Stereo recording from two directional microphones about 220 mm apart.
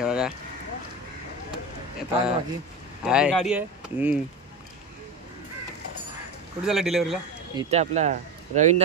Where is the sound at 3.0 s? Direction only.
5° right (ahead or behind).